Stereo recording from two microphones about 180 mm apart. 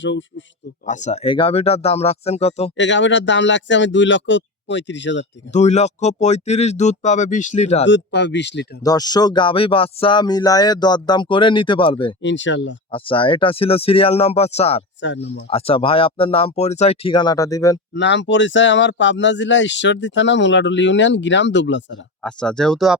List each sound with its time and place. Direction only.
0.0 s speech: 90° left
0.9 s speech: 40° left (ahead or behind)
2.7 s speech: 90° left
5.5 s speech: 40° left (ahead or behind)
7.9 s speech: 85° left
8.8 s speech: 20° left (ahead or behind)
12.2 s speech: 90° left
12.9 s speech: 30° left (ahead or behind)
15.0 s speech: 85° left
15.4 s speech: 30° left (ahead or behind)
17.9 s speech: 80° left
22.2 s speech: 5° left (ahead or behind)